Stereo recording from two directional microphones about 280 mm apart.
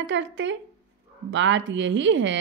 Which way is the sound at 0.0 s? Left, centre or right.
Right.